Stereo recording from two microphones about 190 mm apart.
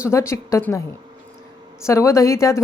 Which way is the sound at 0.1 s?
15° left (ahead or behind).